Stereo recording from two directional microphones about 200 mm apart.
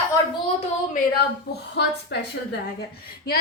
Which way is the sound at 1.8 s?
60° left (ahead or behind).